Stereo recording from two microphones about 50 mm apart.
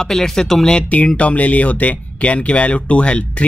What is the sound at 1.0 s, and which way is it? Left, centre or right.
Speech, left.